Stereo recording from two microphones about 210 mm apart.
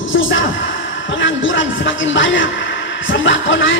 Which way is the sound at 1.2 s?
65° left (ahead or behind).